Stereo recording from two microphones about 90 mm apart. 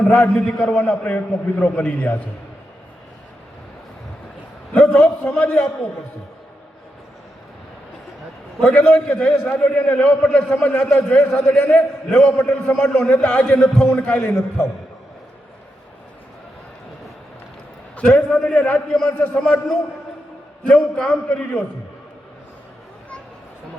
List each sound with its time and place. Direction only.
0.1 s a man's voice: 15° left (ahead or behind)
4.7 s a man's voice: 15° left (ahead or behind)
8.6 s a man's voice: 15° left (ahead or behind)
17.9 s a man's voice: 10° left (ahead or behind)